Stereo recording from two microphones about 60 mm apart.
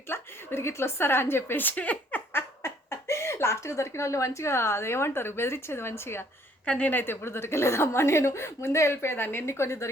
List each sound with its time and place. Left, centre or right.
0.1 s a woman's voice: left
2.6 s speech: left
6.7 s speech: left
7.0 s a woman's voice: left